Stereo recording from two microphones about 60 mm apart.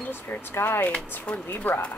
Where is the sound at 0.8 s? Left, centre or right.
Left.